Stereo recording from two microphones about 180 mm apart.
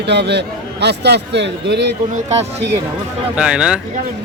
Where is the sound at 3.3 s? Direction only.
5° right (ahead or behind).